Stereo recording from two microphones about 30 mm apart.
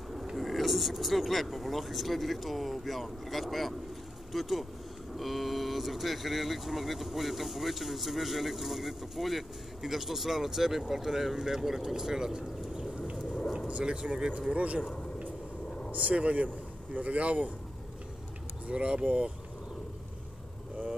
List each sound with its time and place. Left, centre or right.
0.4 s speech: centre; by 12.8 s right
13.8 s speech: centre
14.5 s speech: right
15.9 s speech: right
18.7 s speech: right